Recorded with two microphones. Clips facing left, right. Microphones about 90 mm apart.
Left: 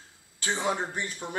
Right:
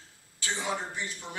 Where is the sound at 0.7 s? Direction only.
45° left (ahead or behind).